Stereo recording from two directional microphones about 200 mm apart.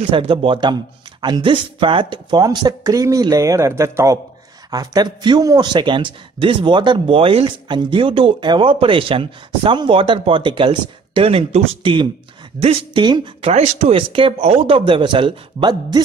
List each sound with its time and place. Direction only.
0.1 s speech: 25° right (ahead or behind)